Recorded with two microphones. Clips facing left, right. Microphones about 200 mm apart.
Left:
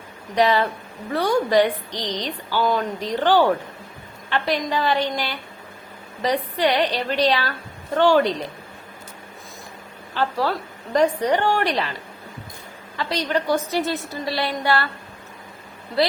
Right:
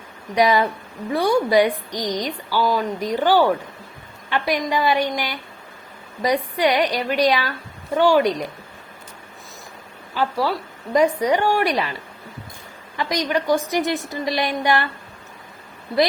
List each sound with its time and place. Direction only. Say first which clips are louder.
0.3 s a woman's voice: right 1 dB; 10° right (ahead or behind)
10.2 s a woman's voice: right 1 dB; 10° right (ahead or behind)
13.0 s a woman's voice: right 1 dB; 15° right (ahead or behind)